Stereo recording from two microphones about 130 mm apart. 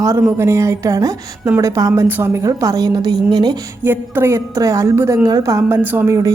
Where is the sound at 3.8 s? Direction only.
15° right (ahead or behind).